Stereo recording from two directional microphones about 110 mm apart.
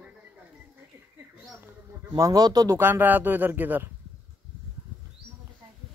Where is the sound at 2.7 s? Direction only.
20° right (ahead or behind).